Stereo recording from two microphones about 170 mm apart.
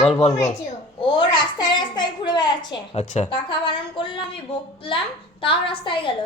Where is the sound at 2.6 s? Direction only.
40° left (ahead or behind).